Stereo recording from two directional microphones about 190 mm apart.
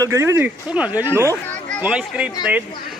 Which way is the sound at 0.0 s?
15° right (ahead or behind).